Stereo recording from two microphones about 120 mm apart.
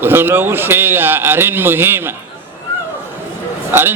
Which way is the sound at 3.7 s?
20° right (ahead or behind).